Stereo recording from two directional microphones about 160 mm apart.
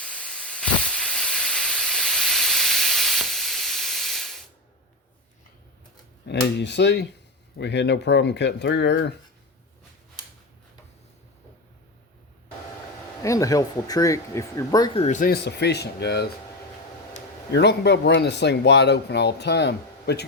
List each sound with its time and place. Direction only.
0.0 s steam: 5° left (ahead or behind)
6.3 s speech: 90° left
13.2 s speech: 20° left (ahead or behind)
14.9 s speech: 50° left (ahead or behind)
15.3 s speech: 90° left
17.5 s speech: 90° left